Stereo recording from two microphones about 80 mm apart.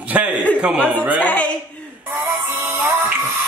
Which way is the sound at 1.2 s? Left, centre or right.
Centre.